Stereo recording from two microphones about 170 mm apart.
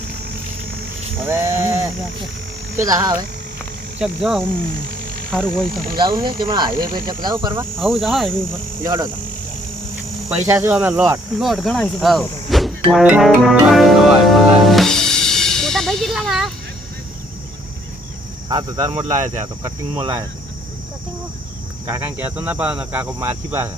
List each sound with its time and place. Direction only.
1.2 s a sound: 15° right (ahead or behind)
2.7 s speech: 20° right (ahead or behind)
4.0 s speech: centre (ahead or behind)
5.7 s speech: 60° right (ahead or behind)
6.4 s speech: 30° right (ahead or behind)
7.8 s speech: centre (ahead or behind)
8.8 s speech: 25° right (ahead or behind)
10.2 s cricket: 15° right (ahead or behind)
11.3 s speech: centre (ahead or behind)
18.4 s speech: 25° right (ahead or behind)
21.8 s speech: 20° right (ahead or behind)
22.2 s cricket: 10° right (ahead or behind)